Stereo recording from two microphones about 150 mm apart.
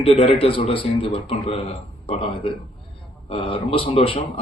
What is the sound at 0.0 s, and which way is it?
A man's voice, 40° left (ahead or behind).